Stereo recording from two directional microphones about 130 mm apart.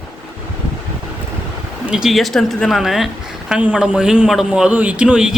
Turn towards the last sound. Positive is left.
turn(degrees=-5)  # may be behind; listen again after turning